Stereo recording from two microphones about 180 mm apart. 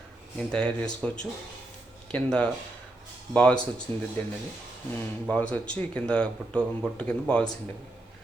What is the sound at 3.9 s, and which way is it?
Speech, 30° right (ahead or behind).